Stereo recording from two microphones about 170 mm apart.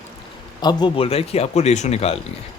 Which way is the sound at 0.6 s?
25° left (ahead or behind).